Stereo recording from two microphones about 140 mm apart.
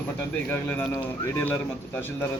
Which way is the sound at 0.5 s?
15° left (ahead or behind).